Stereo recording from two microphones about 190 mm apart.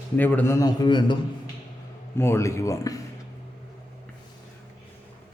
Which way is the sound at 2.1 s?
15° left (ahead or behind).